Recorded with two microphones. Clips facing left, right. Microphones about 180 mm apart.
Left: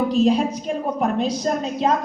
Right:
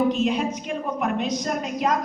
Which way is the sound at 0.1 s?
35° left (ahead or behind).